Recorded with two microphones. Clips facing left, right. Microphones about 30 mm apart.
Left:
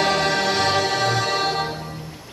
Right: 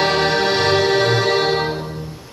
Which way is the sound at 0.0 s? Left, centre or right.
Right.